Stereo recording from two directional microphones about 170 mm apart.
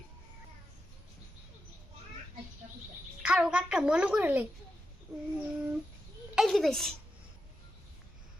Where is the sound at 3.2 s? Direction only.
5° right (ahead or behind).